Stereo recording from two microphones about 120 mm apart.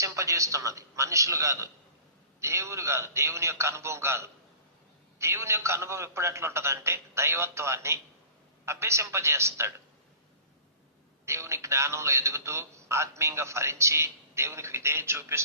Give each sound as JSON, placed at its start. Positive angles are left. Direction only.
{"t": 0.0, "sound": "a man's voice", "side_deg": -25}
{"t": 11.3, "sound": "a man's voice", "side_deg": -25}